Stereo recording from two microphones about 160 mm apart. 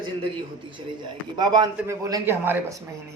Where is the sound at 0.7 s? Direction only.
30° right (ahead or behind).